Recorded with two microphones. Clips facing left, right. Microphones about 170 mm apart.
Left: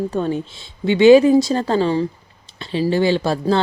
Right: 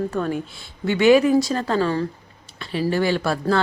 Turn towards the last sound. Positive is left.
turn(degrees=25)  # may be behind; listen again after turning